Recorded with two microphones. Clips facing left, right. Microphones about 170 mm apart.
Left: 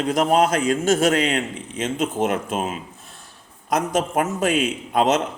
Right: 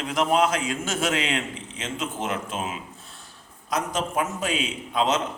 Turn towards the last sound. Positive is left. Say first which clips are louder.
# left 5 dB
turn(degrees=50)  # may be behind; listen again after turning